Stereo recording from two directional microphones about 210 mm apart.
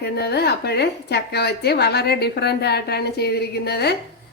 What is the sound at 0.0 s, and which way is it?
Speech, 50° left (ahead or behind).